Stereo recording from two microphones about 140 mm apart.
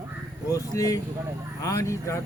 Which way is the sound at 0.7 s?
25° left (ahead or behind).